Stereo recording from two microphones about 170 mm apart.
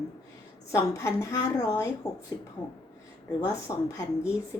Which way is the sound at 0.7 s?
15° left (ahead or behind).